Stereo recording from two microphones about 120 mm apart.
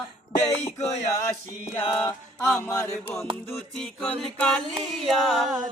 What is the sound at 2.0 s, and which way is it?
Mantra, 25° left (ahead or behind).